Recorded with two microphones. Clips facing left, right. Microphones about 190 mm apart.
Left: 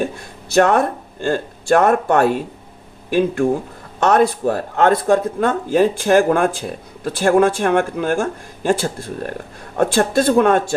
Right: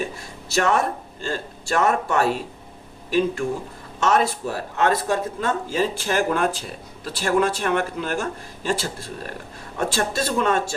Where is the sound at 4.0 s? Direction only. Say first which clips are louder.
Left 6 dB; 55° left (ahead or behind).